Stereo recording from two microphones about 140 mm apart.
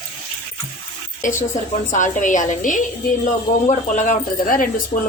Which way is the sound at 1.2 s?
65° left (ahead or behind).